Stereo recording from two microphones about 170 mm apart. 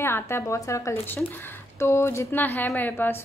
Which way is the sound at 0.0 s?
15° left (ahead or behind).